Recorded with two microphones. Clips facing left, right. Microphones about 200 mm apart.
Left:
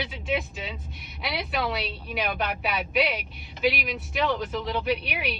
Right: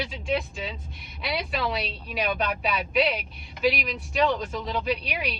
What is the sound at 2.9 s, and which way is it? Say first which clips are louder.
A woman's voice: right 2 dB; centre (ahead or behind).